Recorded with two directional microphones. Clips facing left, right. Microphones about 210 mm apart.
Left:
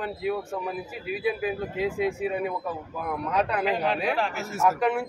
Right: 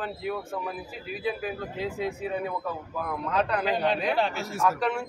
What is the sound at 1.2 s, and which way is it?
Speech, 10° left (ahead or behind).